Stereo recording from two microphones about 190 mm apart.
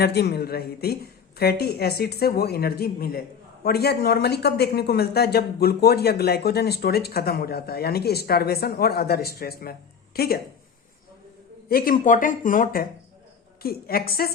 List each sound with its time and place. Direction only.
0.0 s a woman's voice: 55° left (ahead or behind)
11.7 s speech: 45° left (ahead or behind)